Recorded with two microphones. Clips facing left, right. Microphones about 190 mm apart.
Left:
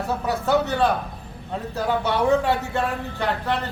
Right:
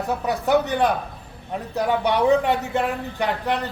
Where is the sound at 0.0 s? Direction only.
15° right (ahead or behind).